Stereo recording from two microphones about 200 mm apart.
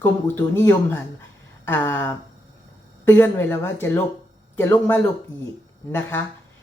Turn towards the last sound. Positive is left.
turn(degrees=10)  # may be behind; listen again after turning